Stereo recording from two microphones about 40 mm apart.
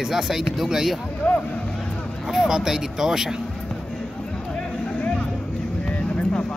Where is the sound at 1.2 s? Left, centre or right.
Left.